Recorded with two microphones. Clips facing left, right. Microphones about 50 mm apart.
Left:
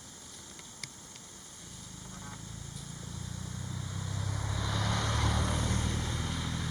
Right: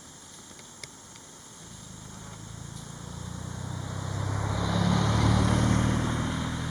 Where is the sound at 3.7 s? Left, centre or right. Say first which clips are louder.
Right 6 dB; right.